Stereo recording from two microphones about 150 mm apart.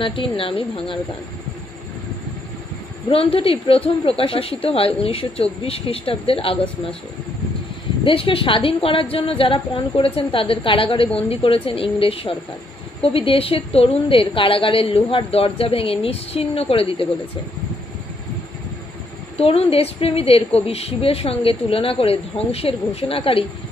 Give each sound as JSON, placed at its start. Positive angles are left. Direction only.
{"t": 0.0, "sound": "a woman's voice", "side_deg": 35}
{"t": 3.1, "sound": "a woman's voice", "side_deg": 40}
{"t": 8.0, "sound": "a woman's voice", "side_deg": 40}
{"t": 19.3, "sound": "a woman's voice", "side_deg": 40}